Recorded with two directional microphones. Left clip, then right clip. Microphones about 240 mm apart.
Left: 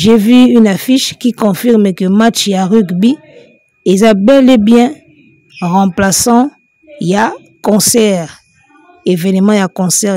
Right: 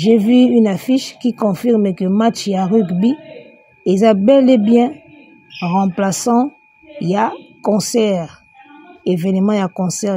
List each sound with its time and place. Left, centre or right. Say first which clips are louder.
0.0 s speech: left 5 dB; left